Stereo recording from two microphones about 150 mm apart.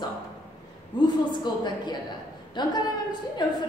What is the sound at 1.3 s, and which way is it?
A woman's voice, 30° left (ahead or behind).